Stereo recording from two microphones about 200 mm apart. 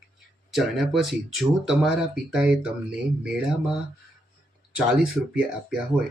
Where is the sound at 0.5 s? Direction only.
Centre (ahead or behind).